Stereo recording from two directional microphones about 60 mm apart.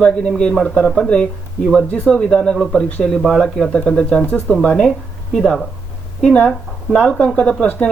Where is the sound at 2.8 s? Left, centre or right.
Left.